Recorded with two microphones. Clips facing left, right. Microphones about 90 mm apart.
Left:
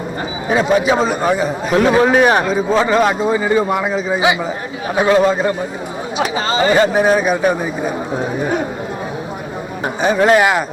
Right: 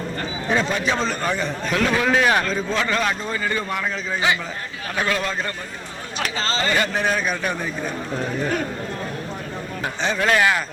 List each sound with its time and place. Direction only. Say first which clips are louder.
0.4 s a man's voice: left 8 dB; 10° left (ahead or behind)
1.7 s a man's voice: left 8 dB; 25° left (ahead or behind); by 4.5 s 10° left (ahead or behind)
4.9 s speech: left 11 dB; 20° left (ahead or behind)
5.3 s a man's voice: left 11 dB; 10° left (ahead or behind)
10.2 s speech: left 6 dB; 25° left (ahead or behind)